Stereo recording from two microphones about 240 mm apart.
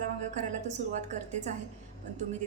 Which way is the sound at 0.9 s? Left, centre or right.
Right.